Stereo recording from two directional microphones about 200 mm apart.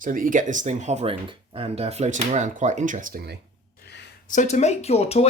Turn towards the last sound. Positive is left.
turn(degrees=30)  # may be behind; listen again after turning